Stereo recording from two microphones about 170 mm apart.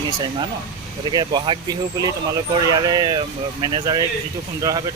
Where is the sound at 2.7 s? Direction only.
25° right (ahead or behind).